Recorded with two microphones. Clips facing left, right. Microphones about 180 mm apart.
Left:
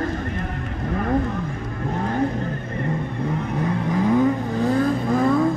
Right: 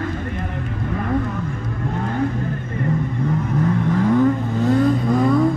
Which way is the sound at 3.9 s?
10° left (ahead or behind).